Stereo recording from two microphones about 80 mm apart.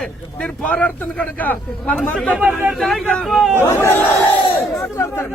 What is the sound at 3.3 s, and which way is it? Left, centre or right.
Speech, centre.